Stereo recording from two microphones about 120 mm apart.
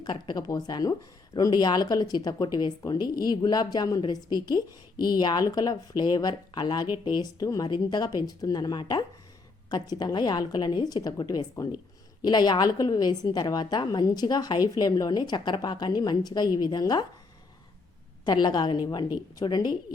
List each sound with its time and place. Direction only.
0.0 s speech: 35° left (ahead or behind)
18.3 s speech: 35° left (ahead or behind)